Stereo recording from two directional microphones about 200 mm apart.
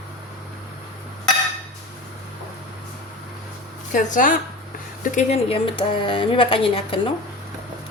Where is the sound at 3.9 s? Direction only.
40° left (ahead or behind).